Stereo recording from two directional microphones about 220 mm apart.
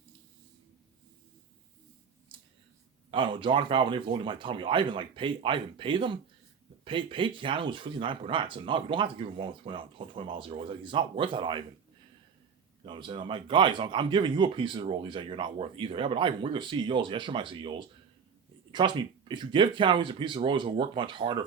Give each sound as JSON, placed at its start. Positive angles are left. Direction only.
{"t": 2.3, "sound": "a sound", "side_deg": -20}
{"t": 3.1, "sound": "speech", "side_deg": -20}
{"t": 12.8, "sound": "speech", "side_deg": -20}